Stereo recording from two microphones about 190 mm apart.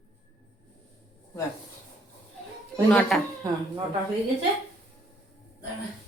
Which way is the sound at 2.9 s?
5° left (ahead or behind).